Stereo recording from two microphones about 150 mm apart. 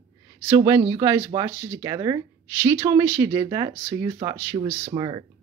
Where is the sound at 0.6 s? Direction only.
20° right (ahead or behind).